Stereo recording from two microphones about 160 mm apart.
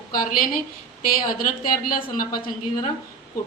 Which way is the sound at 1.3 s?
65° left (ahead or behind).